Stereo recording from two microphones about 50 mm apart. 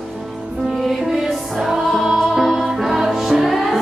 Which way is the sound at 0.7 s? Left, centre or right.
Centre.